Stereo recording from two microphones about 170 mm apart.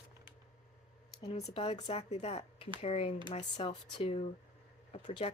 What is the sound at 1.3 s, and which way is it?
Speech, 35° left (ahead or behind).